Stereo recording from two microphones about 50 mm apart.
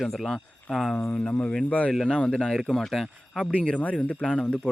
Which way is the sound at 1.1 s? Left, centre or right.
Left.